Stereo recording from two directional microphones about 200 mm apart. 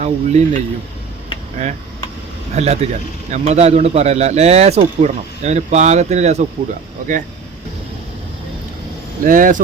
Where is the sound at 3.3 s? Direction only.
35° right (ahead or behind).